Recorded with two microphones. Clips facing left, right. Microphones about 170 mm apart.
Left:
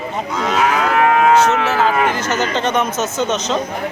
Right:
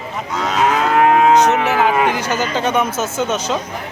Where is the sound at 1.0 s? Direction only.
30° right (ahead or behind).